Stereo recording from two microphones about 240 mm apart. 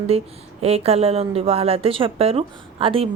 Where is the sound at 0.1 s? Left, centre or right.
Right.